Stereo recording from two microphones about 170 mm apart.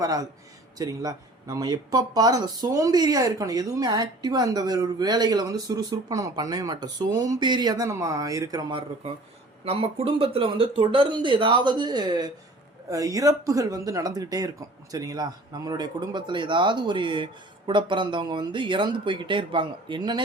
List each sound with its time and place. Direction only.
0.0 s speech: 20° right (ahead or behind)
9.6 s speech: 35° right (ahead or behind)